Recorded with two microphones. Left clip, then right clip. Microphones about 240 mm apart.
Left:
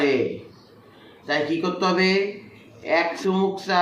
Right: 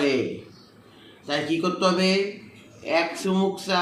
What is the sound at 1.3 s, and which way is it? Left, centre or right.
Speech, centre.